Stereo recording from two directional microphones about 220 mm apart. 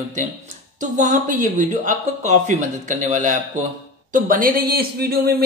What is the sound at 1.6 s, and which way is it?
Speech, 35° right (ahead or behind).